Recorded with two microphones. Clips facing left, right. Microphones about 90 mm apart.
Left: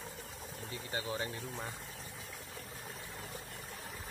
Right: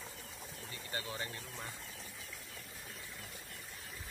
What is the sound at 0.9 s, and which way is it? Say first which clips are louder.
Speech: left 4 dB; 20° left (ahead or behind).